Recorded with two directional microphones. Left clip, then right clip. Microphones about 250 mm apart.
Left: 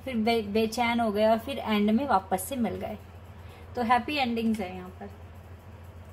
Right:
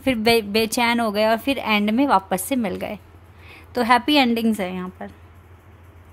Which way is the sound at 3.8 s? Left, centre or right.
Right.